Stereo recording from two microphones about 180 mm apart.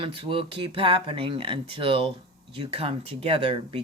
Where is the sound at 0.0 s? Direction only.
30° right (ahead or behind).